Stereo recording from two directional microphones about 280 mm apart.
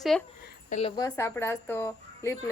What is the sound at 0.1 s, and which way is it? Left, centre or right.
Speech, centre.